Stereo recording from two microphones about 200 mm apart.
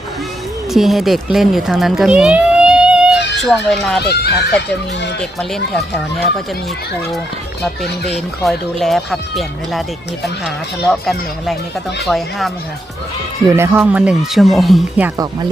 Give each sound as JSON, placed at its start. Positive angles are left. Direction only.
{"t": 0.7, "sound": "speech", "side_deg": 0}
{"t": 4.0, "sound": "speech", "side_deg": 55}
{"t": 5.2, "sound": "speech", "side_deg": 0}
{"t": 8.4, "sound": "speech", "side_deg": 0}
{"t": 11.0, "sound": "speech", "side_deg": 0}
{"t": 13.6, "sound": "speech", "side_deg": -10}